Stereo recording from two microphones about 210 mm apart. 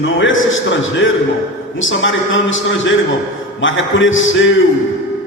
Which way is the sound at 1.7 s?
65° left (ahead or behind).